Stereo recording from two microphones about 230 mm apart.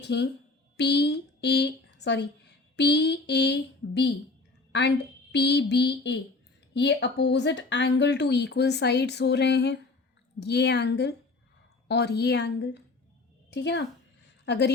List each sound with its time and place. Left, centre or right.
0.0 s a woman's voice: left